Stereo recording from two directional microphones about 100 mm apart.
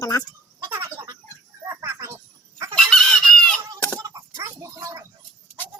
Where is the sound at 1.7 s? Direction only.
30° right (ahead or behind).